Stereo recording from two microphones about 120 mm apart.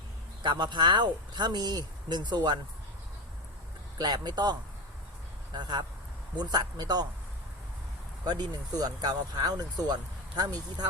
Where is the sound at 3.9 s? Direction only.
35° right (ahead or behind).